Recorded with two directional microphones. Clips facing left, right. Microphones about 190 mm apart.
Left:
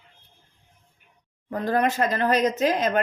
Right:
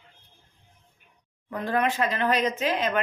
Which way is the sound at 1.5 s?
40° left (ahead or behind).